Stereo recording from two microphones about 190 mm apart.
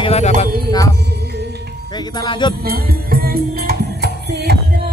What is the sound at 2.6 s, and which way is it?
Music, 55° right (ahead or behind).